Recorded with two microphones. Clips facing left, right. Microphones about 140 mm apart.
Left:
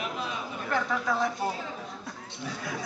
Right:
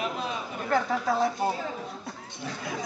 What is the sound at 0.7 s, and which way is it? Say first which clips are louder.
Speech: right 3 dB; 35° right (ahead or behind).